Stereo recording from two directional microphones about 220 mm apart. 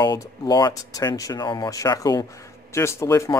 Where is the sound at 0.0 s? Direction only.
20° left (ahead or behind).